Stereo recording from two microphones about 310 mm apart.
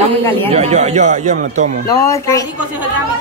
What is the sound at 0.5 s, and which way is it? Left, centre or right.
Speech, right.